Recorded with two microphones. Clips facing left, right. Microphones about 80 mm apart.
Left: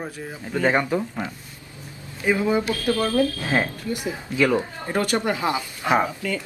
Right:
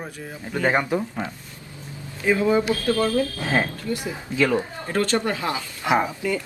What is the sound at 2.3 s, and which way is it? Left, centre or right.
Speech, centre.